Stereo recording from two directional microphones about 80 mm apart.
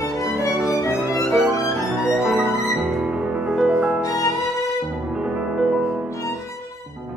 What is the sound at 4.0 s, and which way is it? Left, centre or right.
Music, left.